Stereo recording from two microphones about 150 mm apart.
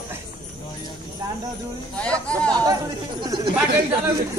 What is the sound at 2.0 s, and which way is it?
Chatter, 10° left (ahead or behind).